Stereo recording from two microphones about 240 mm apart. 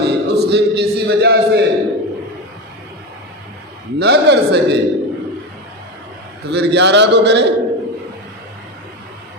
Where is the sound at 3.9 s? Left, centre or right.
Right.